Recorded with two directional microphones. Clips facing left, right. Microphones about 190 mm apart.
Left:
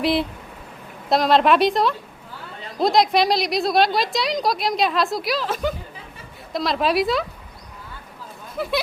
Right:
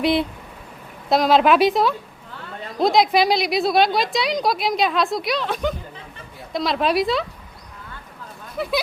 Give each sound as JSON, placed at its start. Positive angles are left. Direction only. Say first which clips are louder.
{"t": 0.0, "sound": "a woman's voice", "louder": "right 1 dB", "side_deg": 0}
{"t": 8.5, "sound": "speech", "louder": "right 1 dB", "side_deg": 0}